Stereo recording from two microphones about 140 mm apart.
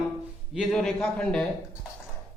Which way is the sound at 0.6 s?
5° left (ahead or behind).